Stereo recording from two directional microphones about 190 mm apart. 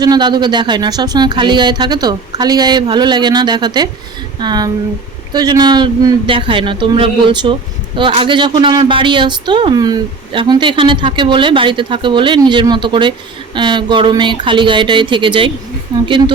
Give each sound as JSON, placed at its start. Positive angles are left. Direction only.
{"t": 0.0, "sound": "speech", "side_deg": -20}